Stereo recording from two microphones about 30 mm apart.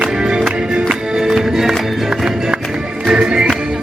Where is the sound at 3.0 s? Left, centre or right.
Right.